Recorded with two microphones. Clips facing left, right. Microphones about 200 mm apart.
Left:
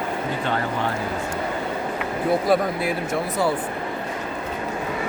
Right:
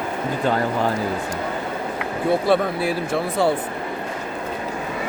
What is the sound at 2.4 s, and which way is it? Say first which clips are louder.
Speech: right 1 dB; 30° right (ahead or behind).